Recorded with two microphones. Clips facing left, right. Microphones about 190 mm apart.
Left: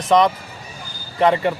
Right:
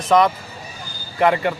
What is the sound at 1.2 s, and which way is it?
Speech, 25° left (ahead or behind).